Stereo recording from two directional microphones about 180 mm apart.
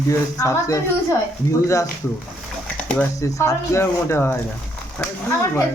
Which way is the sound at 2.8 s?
10° left (ahead or behind).